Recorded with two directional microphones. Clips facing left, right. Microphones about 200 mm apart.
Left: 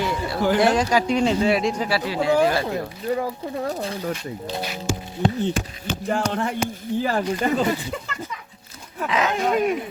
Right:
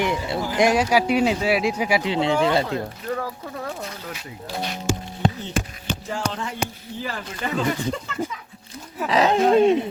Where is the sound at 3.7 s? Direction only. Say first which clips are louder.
Left 5 dB; 35° left (ahead or behind).